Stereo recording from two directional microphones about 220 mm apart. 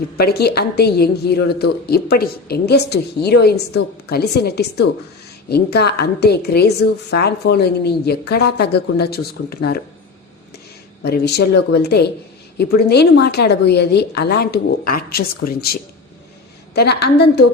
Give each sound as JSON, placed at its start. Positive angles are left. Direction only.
{"t": 0.2, "sound": "a woman's voice", "side_deg": 45}
{"t": 11.0, "sound": "a woman's voice", "side_deg": 45}